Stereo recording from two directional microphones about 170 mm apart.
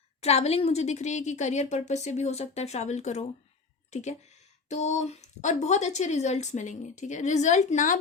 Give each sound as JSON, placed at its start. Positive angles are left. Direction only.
{"t": 0.2, "sound": "a woman's voice", "side_deg": 40}